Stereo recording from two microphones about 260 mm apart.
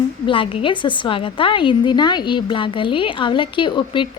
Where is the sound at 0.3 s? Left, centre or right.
Centre.